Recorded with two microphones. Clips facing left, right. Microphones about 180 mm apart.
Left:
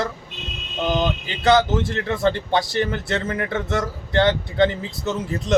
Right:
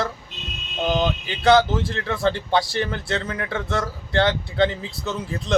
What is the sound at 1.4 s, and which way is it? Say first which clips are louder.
Speech: even; 20° left (ahead or behind).